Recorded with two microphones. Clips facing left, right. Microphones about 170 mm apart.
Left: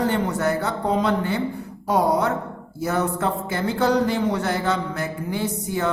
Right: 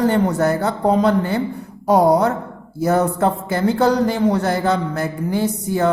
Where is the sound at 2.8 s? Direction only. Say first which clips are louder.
Right 6 dB; 40° right (ahead or behind).